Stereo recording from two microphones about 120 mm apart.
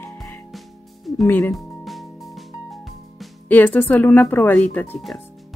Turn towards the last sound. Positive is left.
turn(degrees=15)  # may be behind; listen again after turning